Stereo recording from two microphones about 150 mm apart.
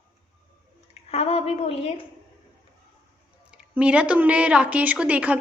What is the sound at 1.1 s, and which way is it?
Speech, 40° left (ahead or behind).